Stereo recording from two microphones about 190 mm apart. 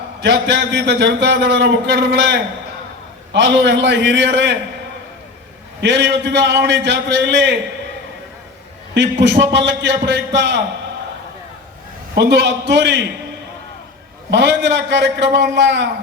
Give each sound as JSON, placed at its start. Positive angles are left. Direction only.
{"t": 0.2, "sound": "a man's voice", "side_deg": -65}
{"t": 5.8, "sound": "a man's voice", "side_deg": -65}
{"t": 9.0, "sound": "a man's voice", "side_deg": -65}
{"t": 12.1, "sound": "a man's voice", "side_deg": -65}
{"t": 14.3, "sound": "a man's voice", "side_deg": -65}